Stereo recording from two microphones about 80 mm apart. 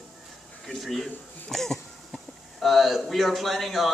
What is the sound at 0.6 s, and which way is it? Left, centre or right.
Speech, centre.